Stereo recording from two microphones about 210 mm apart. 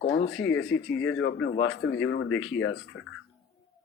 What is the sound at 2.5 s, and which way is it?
Speech, 75° left (ahead or behind).